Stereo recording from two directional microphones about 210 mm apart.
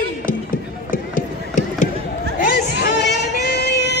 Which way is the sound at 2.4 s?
55° left (ahead or behind).